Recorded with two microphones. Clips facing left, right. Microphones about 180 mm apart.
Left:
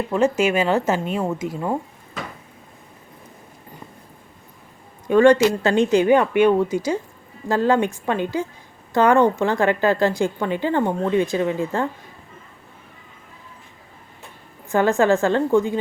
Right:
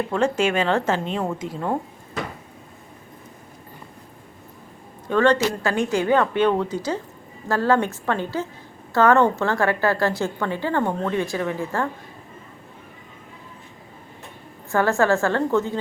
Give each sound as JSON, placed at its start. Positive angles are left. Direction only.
{"t": 0.1, "sound": "a woman's voice", "side_deg": 5}
{"t": 5.0, "sound": "a woman's voice", "side_deg": 10}
{"t": 14.7, "sound": "a woman's voice", "side_deg": 20}